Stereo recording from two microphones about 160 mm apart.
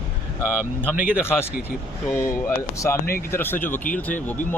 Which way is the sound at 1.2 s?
15° left (ahead or behind).